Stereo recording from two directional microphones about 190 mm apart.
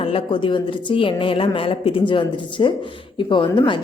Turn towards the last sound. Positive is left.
turn(degrees=25)  # may be behind; listen again after turning